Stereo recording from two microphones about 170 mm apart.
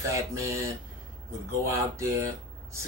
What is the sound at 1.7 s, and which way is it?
Speech, 15° right (ahead or behind).